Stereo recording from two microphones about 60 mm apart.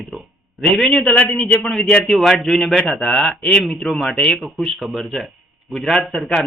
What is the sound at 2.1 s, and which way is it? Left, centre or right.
Speech, centre.